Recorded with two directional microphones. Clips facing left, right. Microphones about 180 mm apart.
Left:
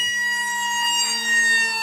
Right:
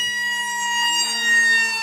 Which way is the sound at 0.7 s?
Centre (ahead or behind).